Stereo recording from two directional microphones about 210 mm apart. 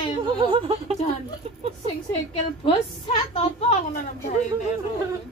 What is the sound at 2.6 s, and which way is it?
A woman's voice, 25° left (ahead or behind).